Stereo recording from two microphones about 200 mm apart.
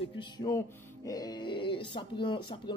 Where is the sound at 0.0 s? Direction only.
25° left (ahead or behind).